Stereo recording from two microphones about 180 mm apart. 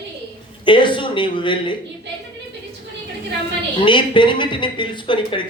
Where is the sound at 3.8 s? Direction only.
25° left (ahead or behind).